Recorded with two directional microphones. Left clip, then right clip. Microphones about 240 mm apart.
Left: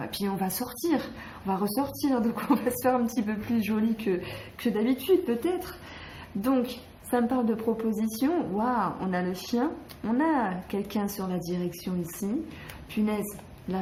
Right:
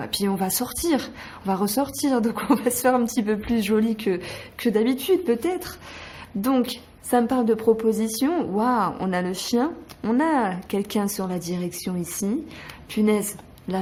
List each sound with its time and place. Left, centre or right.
0.0 s a woman's voice: right
13.7 s speech: right